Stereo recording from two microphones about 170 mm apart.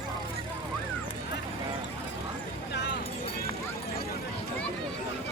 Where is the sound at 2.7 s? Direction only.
90° left.